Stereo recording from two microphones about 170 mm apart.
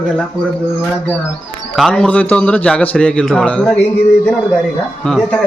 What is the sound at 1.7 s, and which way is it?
A man's voice, centre (ahead or behind).